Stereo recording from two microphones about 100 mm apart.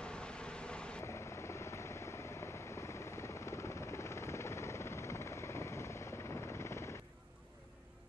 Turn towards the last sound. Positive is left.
turn(degrees=30)  # may be behind; listen again after turning